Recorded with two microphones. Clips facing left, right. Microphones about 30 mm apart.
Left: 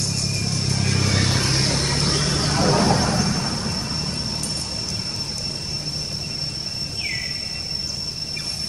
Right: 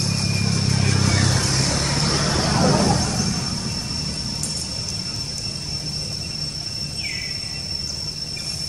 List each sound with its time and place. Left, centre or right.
0.0 s vehicle: right
0.9 s vehicle: centre
1.3 s vehicle: left
2.0 s vehicle: centre